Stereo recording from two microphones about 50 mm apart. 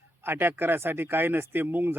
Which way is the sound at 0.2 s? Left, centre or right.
Right.